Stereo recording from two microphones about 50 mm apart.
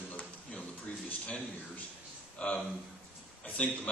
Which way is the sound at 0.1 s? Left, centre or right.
Left.